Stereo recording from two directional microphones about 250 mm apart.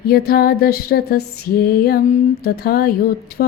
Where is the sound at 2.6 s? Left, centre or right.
Left.